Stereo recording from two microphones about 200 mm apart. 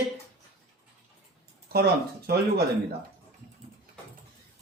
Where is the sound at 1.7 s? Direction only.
50° right (ahead or behind).